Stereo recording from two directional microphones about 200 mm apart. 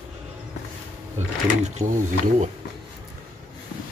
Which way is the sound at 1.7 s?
35° right (ahead or behind).